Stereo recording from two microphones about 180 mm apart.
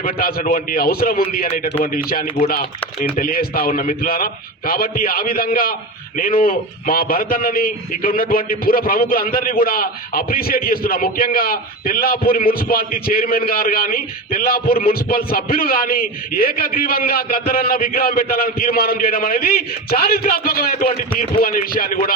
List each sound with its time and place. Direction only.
0.0 s a man's voice: 55° left (ahead or behind)